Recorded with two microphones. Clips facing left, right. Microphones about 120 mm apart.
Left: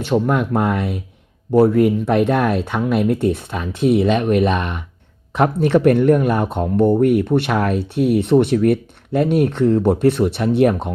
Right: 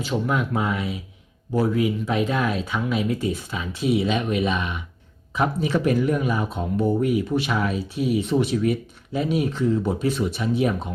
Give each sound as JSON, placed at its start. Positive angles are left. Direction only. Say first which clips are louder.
{"t": 0.0, "sound": "speech", "louder": "left 6 dB", "side_deg": 55}